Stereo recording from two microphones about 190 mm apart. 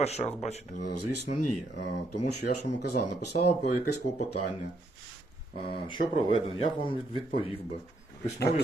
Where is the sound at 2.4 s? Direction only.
55° left (ahead or behind).